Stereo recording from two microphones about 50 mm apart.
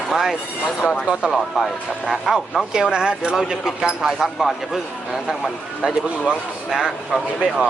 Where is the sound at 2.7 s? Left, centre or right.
Centre.